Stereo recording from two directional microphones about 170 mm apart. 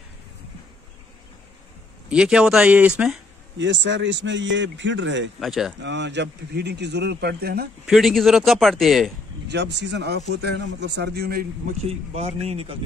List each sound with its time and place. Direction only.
2.0 s a man's voice: 5° right (ahead or behind)
3.5 s speech: 90° right
5.4 s a man's voice: centre (ahead or behind)
5.8 s speech: 90° right; by 7.7 s 65° right (ahead or behind)
7.8 s a man's voice: centre (ahead or behind)
9.5 s speech: 90° right; by 11.4 s 70° right (ahead or behind)
11.8 s speech: 40° right (ahead or behind)